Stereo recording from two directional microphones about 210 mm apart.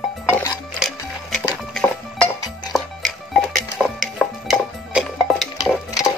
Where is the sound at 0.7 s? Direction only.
Centre (ahead or behind).